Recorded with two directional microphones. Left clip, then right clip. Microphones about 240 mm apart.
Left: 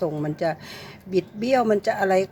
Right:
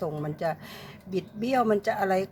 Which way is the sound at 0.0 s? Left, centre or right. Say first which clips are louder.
Left 5 dB; centre.